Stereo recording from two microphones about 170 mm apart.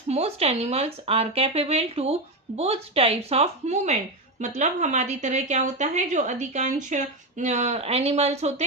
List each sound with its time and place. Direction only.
0.1 s a woman's voice: 35° right (ahead or behind)